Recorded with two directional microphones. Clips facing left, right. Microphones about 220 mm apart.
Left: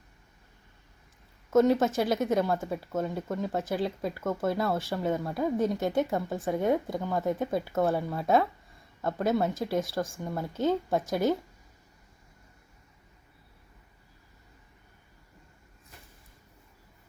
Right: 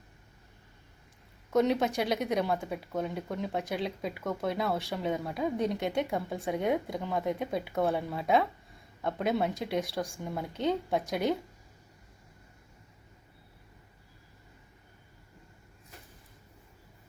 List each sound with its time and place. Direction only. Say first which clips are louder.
1.5 s speech: left 4 dB; 5° left (ahead or behind)